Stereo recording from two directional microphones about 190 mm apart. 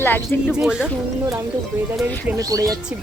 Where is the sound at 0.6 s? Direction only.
5° right (ahead or behind).